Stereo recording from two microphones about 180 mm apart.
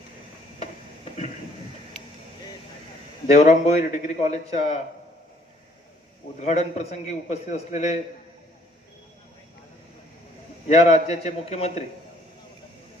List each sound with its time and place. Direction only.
3.2 s a man's voice: 40° left (ahead or behind)
6.4 s a man's voice: 40° left (ahead or behind)
10.7 s a man's voice: 35° left (ahead or behind)